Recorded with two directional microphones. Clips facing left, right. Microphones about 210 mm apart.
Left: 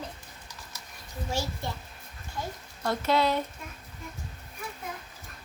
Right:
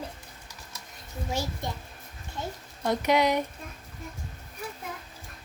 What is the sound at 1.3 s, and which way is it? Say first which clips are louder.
A child's voice: right 1 dB; 15° right (ahead or behind).